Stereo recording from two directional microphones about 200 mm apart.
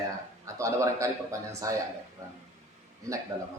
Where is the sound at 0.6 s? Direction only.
15° right (ahead or behind).